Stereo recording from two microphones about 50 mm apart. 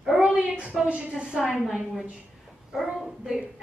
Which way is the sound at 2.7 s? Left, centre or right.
Centre.